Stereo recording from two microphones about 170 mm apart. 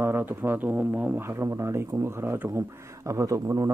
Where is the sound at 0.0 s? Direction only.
15° right (ahead or behind).